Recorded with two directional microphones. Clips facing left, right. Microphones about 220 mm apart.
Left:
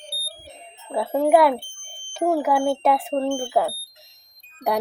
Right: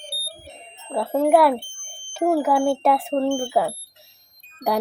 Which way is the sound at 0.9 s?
Centre (ahead or behind).